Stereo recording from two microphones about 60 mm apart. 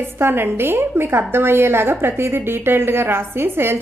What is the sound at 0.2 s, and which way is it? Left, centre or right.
A woman's voice, right.